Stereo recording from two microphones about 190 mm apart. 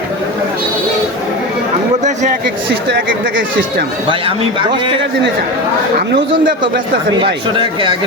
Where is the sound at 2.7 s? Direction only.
60° right (ahead or behind).